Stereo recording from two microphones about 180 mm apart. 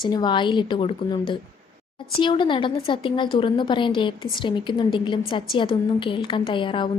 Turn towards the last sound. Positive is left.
turn(degrees=25)  # may be behind; listen again after turning